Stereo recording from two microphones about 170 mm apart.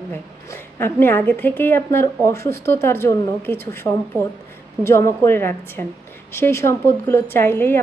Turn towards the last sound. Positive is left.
turn(degrees=15)  # may be behind; listen again after turning